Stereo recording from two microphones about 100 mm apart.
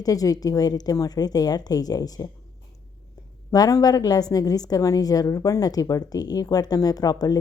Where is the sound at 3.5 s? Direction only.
40° left (ahead or behind).